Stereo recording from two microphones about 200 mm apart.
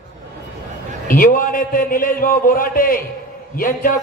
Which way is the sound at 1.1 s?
45° left (ahead or behind).